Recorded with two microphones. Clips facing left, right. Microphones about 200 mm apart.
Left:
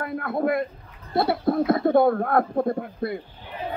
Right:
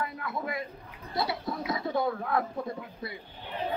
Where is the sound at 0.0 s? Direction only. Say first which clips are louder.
Left 9 dB; 55° left (ahead or behind).